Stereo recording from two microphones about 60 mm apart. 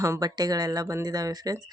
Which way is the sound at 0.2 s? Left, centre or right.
Right.